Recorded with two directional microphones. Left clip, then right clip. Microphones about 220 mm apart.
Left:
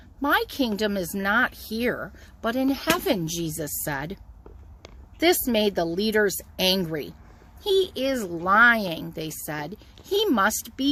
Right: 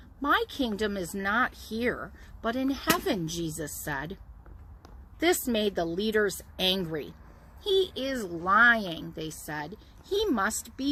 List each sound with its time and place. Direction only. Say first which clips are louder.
0.2 s speech: left 3 dB; 50° left (ahead or behind)
5.2 s speech: left 5 dB; 50° left (ahead or behind)